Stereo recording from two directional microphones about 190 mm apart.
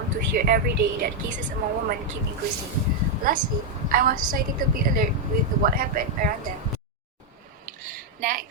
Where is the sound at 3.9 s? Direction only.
50° right (ahead or behind).